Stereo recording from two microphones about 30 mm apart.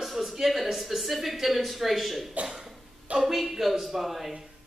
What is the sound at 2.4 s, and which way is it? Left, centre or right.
Cough, right.